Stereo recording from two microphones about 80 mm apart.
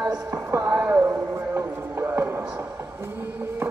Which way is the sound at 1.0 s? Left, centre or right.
Right.